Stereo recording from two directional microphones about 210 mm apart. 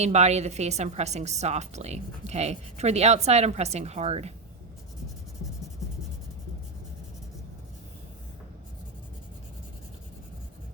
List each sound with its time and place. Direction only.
0.0 s a woman's voice: 30° right (ahead or behind)